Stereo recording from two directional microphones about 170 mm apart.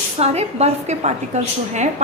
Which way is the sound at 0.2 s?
40° right (ahead or behind).